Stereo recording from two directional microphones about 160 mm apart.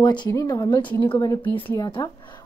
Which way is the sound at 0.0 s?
25° left (ahead or behind).